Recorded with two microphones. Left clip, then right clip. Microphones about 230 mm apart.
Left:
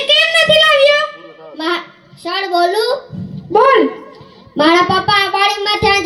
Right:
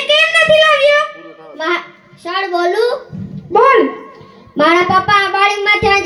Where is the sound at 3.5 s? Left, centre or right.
Left.